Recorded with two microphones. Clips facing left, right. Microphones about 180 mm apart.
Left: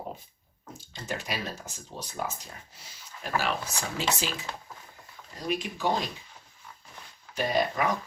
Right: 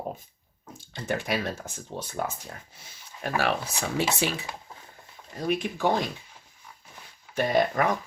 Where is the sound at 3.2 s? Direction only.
65° right (ahead or behind).